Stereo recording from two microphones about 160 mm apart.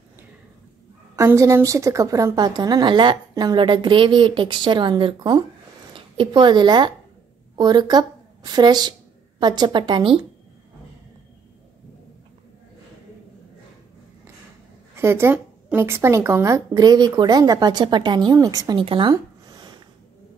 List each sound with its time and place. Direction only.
1.1 s a woman's voice: 20° right (ahead or behind)
15.0 s a woman's voice: 15° right (ahead or behind); by 19.1 s 30° right (ahead or behind)
19.1 s a sound: 25° right (ahead or behind)